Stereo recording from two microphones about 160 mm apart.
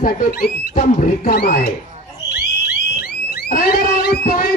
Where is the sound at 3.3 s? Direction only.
65° left (ahead or behind).